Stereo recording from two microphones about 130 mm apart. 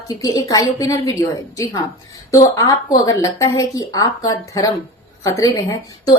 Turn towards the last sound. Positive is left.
turn(degrees=25)  # may be behind; listen again after turning